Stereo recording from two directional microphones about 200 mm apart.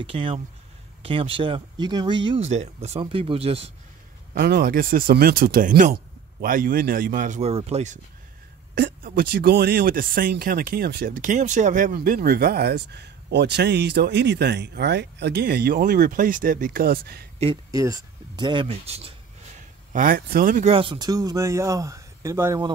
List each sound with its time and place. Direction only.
0.0 s speech: 25° right (ahead or behind)
4.4 s a man's voice: 50° right (ahead or behind); by 8.0 s 35° right (ahead or behind)
8.7 s speech: 50° right (ahead or behind)
17.6 s speech: 15° right (ahead or behind)
19.9 s speech: 45° right (ahead or behind)
20.7 s speech: 25° right (ahead or behind)